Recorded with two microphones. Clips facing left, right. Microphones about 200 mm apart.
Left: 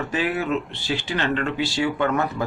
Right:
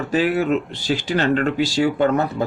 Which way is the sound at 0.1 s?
35° right (ahead or behind).